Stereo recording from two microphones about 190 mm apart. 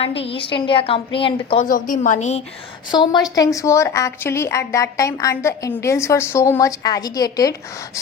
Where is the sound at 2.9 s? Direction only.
25° left (ahead or behind).